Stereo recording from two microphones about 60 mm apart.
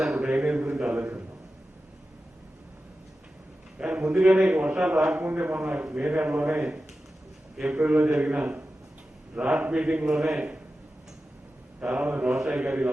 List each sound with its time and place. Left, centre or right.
0.0 s a sound: centre
3.8 s a man's voice: centre
7.8 s a man's voice: right
10.2 s a man's voice: centre
11.8 s a man's voice: centre
12.3 s a man's voice: centre
12.5 s a man's voice: centre